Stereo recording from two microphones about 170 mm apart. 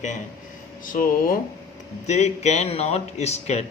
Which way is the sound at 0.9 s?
55° left (ahead or behind).